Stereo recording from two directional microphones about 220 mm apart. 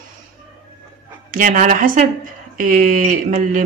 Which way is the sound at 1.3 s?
35° right (ahead or behind).